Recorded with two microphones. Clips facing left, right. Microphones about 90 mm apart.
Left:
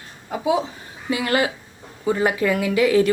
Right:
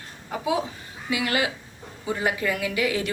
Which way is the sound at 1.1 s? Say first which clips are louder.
Left 4 dB; 35° left (ahead or behind).